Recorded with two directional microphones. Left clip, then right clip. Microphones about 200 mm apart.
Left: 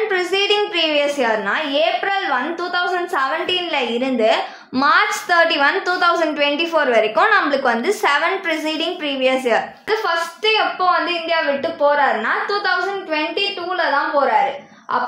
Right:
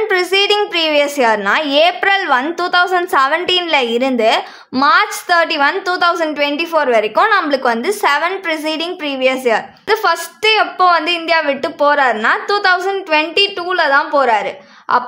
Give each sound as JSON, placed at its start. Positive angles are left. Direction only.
{"t": 0.1, "sound": "a woman's voice", "side_deg": -30}
{"t": 9.8, "sound": "a woman's voice", "side_deg": -40}